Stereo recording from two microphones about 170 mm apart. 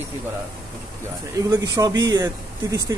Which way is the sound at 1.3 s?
20° right (ahead or behind).